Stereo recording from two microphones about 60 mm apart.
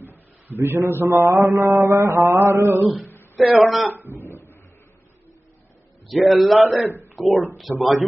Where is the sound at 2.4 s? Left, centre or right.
Right.